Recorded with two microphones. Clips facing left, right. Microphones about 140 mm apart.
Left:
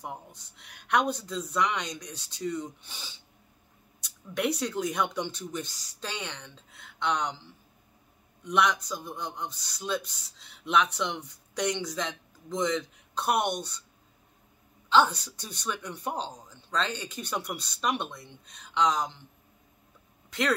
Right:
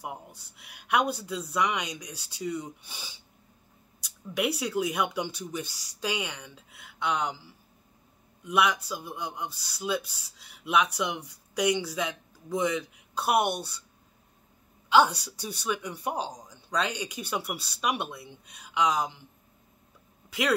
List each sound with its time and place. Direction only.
0.0 s speech: 10° right (ahead or behind)
14.9 s speech: 10° right (ahead or behind)
20.2 s a sound: 10° right (ahead or behind)